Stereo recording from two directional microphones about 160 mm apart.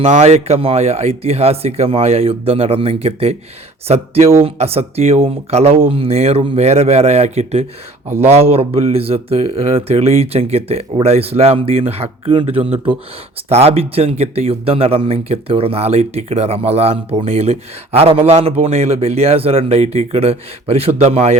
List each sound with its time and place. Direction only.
0.0 s speech: 40° right (ahead or behind)